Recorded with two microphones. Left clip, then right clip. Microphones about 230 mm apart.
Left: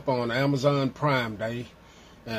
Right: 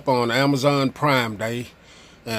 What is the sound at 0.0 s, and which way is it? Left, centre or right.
Speech, right.